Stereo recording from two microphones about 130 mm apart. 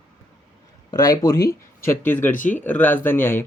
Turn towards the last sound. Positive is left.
turn(degrees=15)  # may be behind; listen again after turning